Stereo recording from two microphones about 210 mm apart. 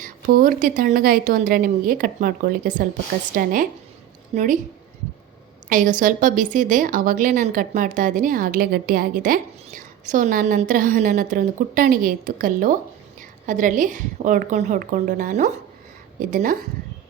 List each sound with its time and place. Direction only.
0.0 s a woman's voice: 40° right (ahead or behind)
5.6 s a woman's voice: 40° right (ahead or behind)